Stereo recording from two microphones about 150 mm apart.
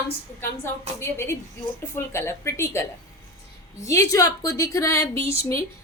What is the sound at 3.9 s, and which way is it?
A woman's voice, 20° left (ahead or behind).